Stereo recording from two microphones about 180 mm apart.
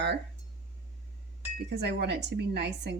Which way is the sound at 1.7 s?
70° right (ahead or behind).